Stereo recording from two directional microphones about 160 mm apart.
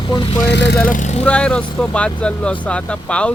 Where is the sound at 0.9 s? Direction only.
50° left (ahead or behind).